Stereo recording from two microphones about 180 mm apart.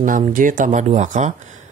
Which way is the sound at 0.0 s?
50° right (ahead or behind).